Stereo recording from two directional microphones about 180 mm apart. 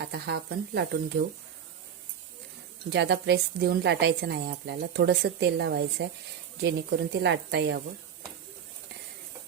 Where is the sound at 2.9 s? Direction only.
70° right (ahead or behind).